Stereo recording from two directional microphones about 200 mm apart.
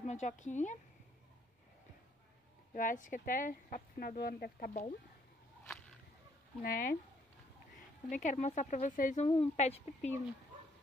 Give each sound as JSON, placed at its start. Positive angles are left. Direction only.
{"t": 0.0, "sound": "speech", "side_deg": 35}
{"t": 2.7, "sound": "speech", "side_deg": 40}
{"t": 6.6, "sound": "speech", "side_deg": 45}